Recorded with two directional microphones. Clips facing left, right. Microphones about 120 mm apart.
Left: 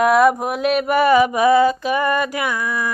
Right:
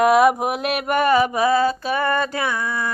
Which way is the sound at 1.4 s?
20° left (ahead or behind).